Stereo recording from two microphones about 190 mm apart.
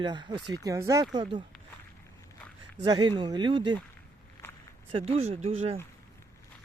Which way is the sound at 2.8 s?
25° right (ahead or behind).